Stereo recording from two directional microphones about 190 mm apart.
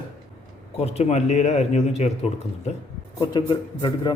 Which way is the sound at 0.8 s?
35° left (ahead or behind).